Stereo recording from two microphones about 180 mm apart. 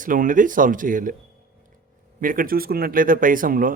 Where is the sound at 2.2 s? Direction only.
50° right (ahead or behind).